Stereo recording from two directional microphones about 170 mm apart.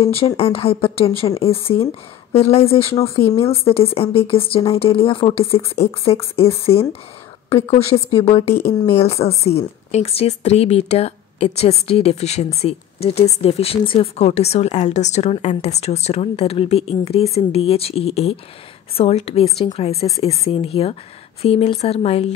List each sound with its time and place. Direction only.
0.0 s speech: 35° left (ahead or behind)